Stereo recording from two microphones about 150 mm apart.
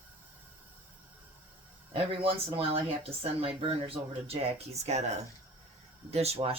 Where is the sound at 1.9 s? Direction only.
40° right (ahead or behind).